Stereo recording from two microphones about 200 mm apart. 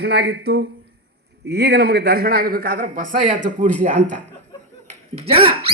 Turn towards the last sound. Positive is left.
turn(degrees=-25)  # may be behind; listen again after turning